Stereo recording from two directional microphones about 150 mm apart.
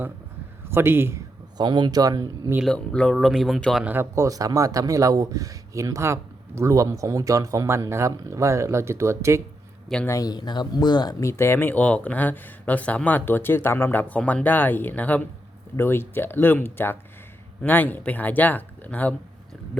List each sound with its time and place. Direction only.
0.7 s a man's voice: 15° right (ahead or behind)
1.5 s speech: 30° right (ahead or behind)
2.6 s speech: 5° left (ahead or behind)
3.8 s speech: 15° right (ahead or behind)
10.1 s speech: 25° left (ahead or behind)